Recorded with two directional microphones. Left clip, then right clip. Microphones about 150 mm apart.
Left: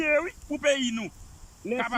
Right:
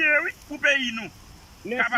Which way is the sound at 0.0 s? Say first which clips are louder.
Right 4 dB; 30° left (ahead or behind).